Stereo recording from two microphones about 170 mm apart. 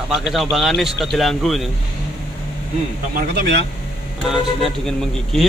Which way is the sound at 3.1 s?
80° right.